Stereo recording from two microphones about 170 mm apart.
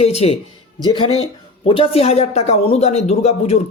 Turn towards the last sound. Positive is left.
turn(degrees=40)  # may be behind; listen again after turning